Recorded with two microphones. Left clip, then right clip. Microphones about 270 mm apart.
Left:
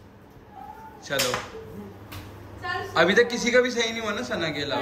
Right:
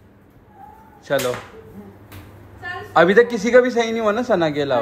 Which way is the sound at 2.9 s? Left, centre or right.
Centre.